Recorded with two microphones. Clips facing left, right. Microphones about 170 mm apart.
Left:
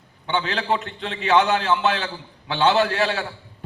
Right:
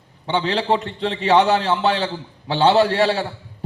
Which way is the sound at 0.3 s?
35° right (ahead or behind).